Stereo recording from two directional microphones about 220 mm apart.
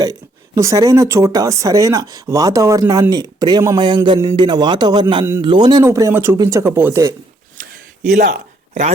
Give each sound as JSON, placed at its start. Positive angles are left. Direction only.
{"t": 0.0, "sound": "speech", "side_deg": -15}
{"t": 8.1, "sound": "speech", "side_deg": -45}